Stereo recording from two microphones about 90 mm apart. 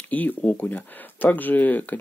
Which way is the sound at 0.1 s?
20° left (ahead or behind).